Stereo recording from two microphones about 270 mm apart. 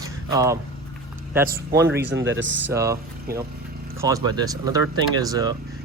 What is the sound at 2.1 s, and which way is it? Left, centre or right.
Speech, right.